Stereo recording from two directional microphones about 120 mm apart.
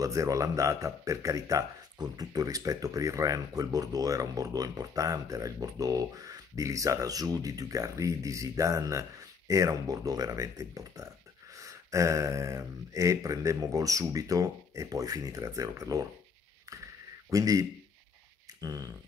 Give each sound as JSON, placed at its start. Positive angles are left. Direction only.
{"t": 0.0, "sound": "speech", "side_deg": -25}
{"t": 17.3, "sound": "speech", "side_deg": -30}
{"t": 18.6, "sound": "a sound", "side_deg": -30}